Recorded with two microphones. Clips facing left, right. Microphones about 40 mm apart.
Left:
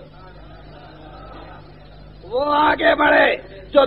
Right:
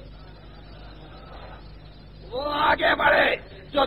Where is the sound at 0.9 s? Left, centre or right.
Left.